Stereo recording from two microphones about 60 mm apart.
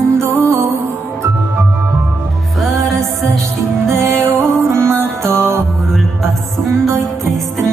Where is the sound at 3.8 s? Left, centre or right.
Right.